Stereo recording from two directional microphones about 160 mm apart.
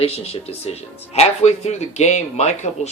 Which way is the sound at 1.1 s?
45° left (ahead or behind).